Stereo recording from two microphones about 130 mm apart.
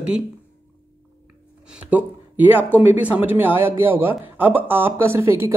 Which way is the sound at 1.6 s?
10° right (ahead or behind).